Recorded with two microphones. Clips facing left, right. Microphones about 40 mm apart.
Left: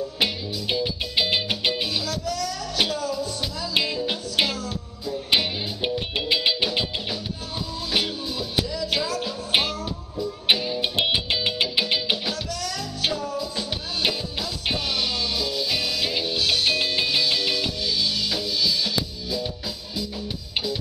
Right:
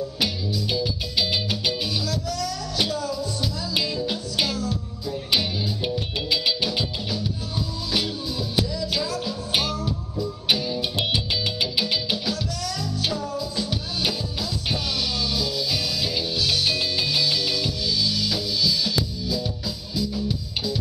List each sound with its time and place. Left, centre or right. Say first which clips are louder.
0.2 s music: left 1 dB; left
3.0 s music: left 1 dB; centre
3.7 s music: left 3 dB; left
9.2 s music: left 2 dB; left